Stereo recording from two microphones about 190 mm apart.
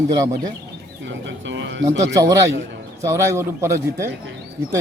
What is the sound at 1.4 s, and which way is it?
Speech, 70° right (ahead or behind).